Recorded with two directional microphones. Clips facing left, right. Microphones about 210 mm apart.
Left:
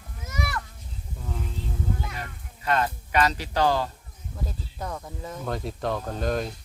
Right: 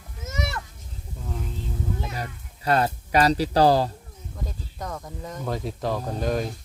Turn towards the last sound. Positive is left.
turn(degrees=0)  # may be behind; listen again after turning